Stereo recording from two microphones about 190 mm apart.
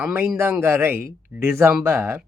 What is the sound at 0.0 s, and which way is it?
A man's voice, 10° right (ahead or behind).